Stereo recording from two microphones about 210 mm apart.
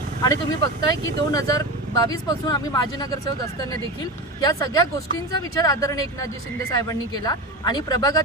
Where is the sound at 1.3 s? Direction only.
15° left (ahead or behind).